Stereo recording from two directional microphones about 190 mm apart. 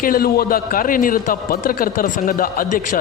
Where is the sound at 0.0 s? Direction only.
50° left (ahead or behind).